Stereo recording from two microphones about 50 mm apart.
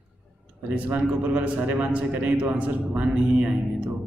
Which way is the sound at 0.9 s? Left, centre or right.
Right.